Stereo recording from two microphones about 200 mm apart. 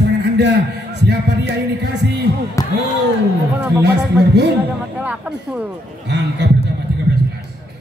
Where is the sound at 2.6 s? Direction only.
15° left (ahead or behind).